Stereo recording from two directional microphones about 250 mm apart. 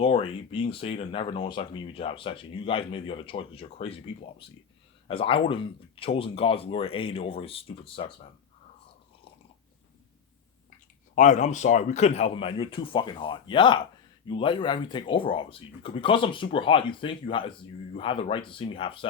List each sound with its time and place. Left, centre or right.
0.0 s speech: left
11.1 s speech: left